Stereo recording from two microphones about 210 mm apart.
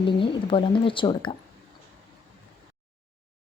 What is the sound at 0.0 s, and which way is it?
Speech, 25° left (ahead or behind).